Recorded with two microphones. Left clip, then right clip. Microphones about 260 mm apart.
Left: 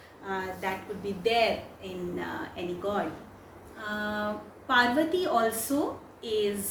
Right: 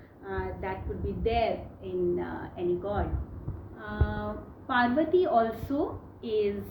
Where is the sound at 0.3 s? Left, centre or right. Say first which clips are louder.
Left 2 dB; centre.